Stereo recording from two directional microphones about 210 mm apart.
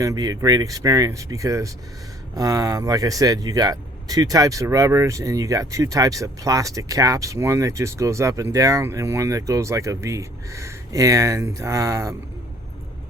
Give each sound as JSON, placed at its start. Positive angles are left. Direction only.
{"t": 0.0, "sound": "speech", "side_deg": -15}